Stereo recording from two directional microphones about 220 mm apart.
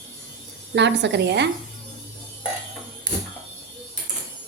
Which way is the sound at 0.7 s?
50° right (ahead or behind).